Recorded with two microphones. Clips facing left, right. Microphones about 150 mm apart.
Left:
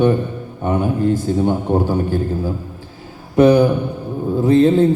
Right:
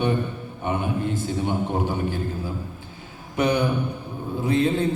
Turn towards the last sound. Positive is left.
turn(degrees=45)  # may be behind; listen again after turning